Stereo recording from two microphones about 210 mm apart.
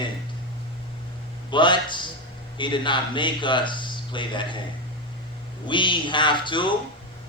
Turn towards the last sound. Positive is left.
turn(degrees=20)  # may be behind; listen again after turning